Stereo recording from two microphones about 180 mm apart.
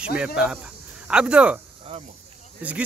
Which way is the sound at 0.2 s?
5° right (ahead or behind).